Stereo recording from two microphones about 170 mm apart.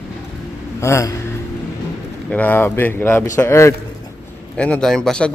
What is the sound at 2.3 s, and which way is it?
Speech, 10° left (ahead or behind).